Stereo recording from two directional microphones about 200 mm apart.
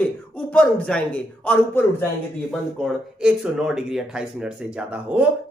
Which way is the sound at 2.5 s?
Centre (ahead or behind).